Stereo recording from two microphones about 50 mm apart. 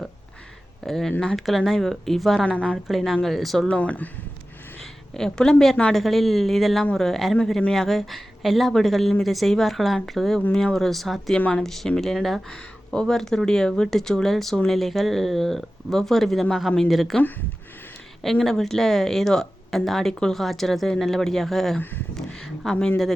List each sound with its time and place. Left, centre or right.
0.9 s speech: centre
2.4 s a woman's voice: left
2.9 s speech: centre
3.7 s speech: left
4.8 s a sound: centre
5.9 s speech: centre
11.3 s a woman's voice: left
11.6 s speech: centre
12.5 s speech: centre
18.4 s speech: centre
21.8 s speech: left
22.1 s a sound: centre